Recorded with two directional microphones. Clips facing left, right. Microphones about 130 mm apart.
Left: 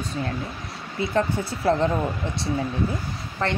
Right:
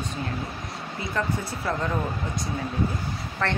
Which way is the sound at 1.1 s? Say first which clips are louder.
Left 4 dB; 35° left (ahead or behind).